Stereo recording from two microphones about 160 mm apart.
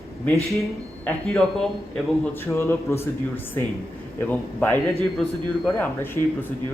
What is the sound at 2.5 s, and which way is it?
A man's voice, 15° left (ahead or behind).